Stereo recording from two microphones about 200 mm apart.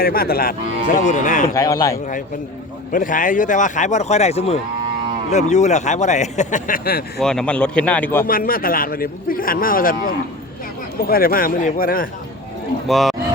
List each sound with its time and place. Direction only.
0.0 s a man's voice: 50° left (ahead or behind)
1.5 s speech: 15° left (ahead or behind)
2.9 s speech: 40° left (ahead or behind)
7.2 s speech: 5° left (ahead or behind)
8.3 s a man's voice: 45° left (ahead or behind)
12.9 s speech: centre (ahead or behind)